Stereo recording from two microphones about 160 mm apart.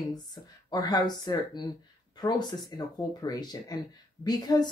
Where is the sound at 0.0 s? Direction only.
25° left (ahead or behind).